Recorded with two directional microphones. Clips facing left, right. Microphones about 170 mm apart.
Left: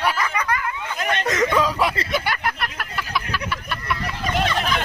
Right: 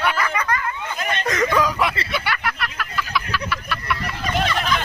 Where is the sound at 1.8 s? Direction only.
45° left (ahead or behind).